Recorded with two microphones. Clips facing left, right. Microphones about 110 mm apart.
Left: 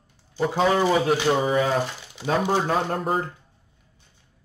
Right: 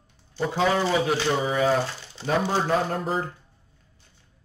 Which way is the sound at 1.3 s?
45° left (ahead or behind).